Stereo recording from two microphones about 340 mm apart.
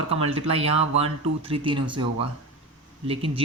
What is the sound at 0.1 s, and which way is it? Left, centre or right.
Speech, centre.